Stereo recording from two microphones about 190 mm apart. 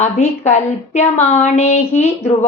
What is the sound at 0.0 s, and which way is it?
A woman's voice, 35° left (ahead or behind).